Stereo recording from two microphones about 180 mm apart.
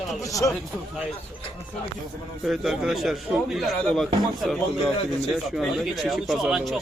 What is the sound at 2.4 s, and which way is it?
Speech, centre (ahead or behind).